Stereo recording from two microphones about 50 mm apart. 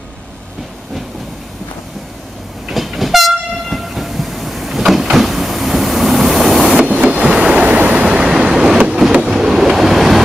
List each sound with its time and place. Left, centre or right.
2.7 s train: centre
7.2 s vehicle: centre
7.5 s train: right
8.1 s train: centre
9.2 s vehicle: centre